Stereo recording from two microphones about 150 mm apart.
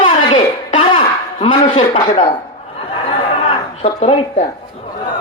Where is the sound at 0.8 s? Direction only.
35° left (ahead or behind).